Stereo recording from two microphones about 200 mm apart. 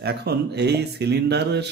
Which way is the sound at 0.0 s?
55° right (ahead or behind).